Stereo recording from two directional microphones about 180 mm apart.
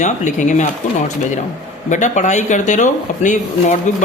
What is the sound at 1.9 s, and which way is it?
Speech, 40° left (ahead or behind).